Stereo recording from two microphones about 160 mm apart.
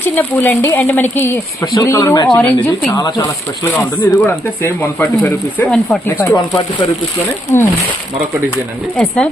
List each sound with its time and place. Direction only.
0.0 s speech: 10° left (ahead or behind)
2.3 s speech: 10° left (ahead or behind)
2.9 s speech: 20° left (ahead or behind)
3.8 s speech: 10° left (ahead or behind)
6.1 s speech: 20° left (ahead or behind)
9.0 s speech: 5° left (ahead or behind)